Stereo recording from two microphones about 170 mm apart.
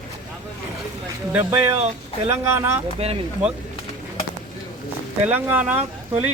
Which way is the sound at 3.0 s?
35° right (ahead or behind).